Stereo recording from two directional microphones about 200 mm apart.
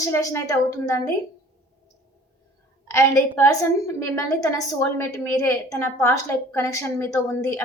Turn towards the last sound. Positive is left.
turn(degrees=15)  # may be behind; listen again after turning